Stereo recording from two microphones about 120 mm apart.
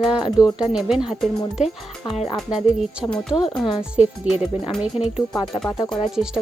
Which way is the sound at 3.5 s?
40° left (ahead or behind).